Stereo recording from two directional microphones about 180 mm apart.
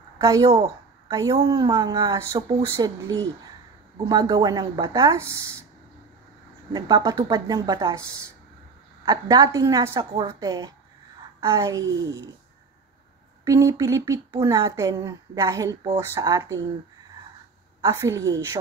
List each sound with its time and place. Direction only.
0.2 s a woman's voice: 20° right (ahead or behind)
0.5 s a sound: 30° right (ahead or behind)
1.1 s speech: 20° right (ahead or behind)
6.7 s speech: 20° right (ahead or behind)
13.4 s speech: 20° right (ahead or behind)
17.8 s speech: 15° right (ahead or behind)